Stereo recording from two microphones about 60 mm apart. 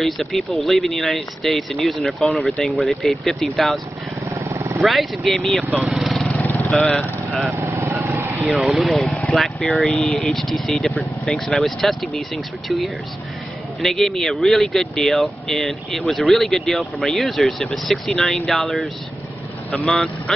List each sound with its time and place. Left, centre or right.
0.0 s speech: centre
4.3 s vehicle: right
4.7 s speech: centre
5.7 s lawn mower: centre
6.8 s speech: left
7.5 s vehicle: right
8.5 s speech: centre
19.9 s speech: centre